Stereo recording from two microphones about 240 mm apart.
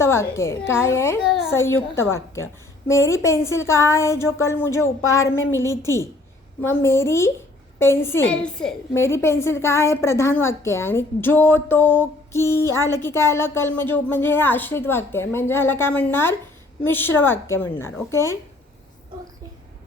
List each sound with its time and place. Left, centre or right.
0.0 s a woman's voice: centre